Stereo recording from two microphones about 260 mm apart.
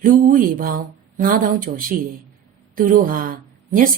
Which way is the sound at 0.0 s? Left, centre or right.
Right.